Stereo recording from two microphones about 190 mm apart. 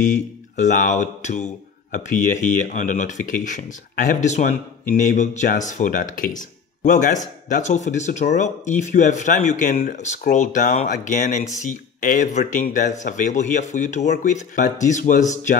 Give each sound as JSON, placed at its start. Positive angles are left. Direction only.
{"t": 0.0, "sound": "a man's voice", "side_deg": 40}